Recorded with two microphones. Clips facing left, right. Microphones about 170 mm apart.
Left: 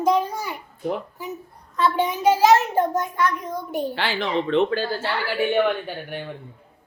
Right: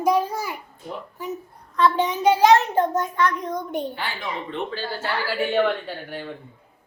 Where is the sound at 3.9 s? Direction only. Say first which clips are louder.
Left 7 dB; 90° left.